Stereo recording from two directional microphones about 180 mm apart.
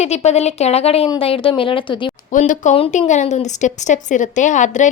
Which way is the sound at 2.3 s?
45° left (ahead or behind).